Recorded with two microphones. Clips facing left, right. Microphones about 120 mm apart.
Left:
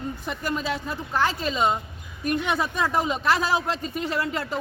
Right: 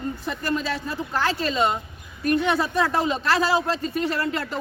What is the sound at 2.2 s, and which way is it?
Speech, 10° left (ahead or behind).